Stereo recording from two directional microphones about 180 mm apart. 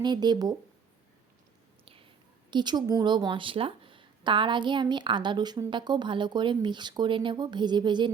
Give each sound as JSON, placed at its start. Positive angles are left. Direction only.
{"t": 0.0, "sound": "a woman's voice", "side_deg": -25}
{"t": 2.5, "sound": "a woman's voice", "side_deg": -25}